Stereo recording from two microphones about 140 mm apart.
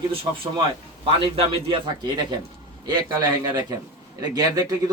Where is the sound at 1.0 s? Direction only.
40° right (ahead or behind).